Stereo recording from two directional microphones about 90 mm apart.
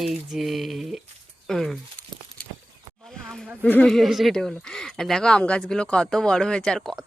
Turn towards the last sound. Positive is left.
turn(degrees=5)  # may be behind; listen again after turning